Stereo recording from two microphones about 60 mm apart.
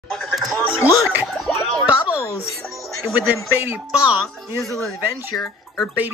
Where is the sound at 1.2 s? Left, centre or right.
Centre.